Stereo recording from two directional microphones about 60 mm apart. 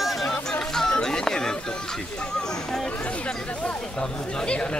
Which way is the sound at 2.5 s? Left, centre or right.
Centre.